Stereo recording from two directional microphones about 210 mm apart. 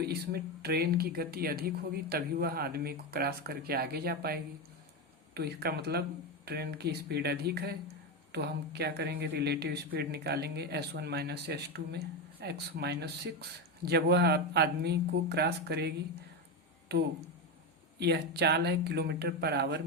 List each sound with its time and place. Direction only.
0.6 s speech: 50° right (ahead or behind)
18.0 s speech: 50° right (ahead or behind)